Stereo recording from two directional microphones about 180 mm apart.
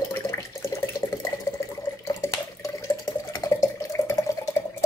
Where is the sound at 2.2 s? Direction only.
15° left (ahead or behind).